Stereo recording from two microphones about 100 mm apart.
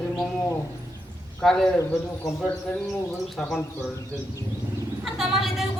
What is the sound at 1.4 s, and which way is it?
Speech, 5° left (ahead or behind).